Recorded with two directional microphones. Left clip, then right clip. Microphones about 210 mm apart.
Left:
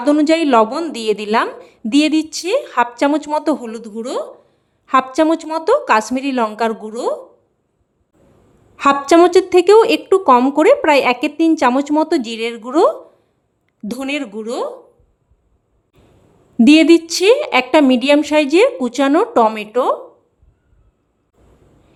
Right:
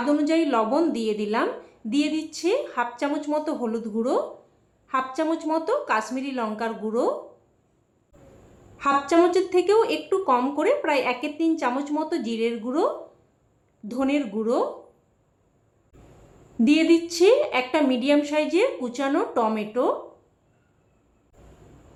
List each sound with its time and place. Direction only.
0.0 s a woman's voice: 50° left (ahead or behind)
8.8 s a woman's voice: 50° left (ahead or behind)
16.6 s a woman's voice: 50° left (ahead or behind)